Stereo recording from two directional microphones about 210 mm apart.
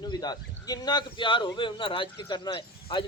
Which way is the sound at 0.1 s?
20° left (ahead or behind).